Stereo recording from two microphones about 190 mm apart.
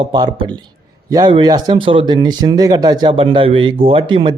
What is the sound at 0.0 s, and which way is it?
Speech, 25° right (ahead or behind).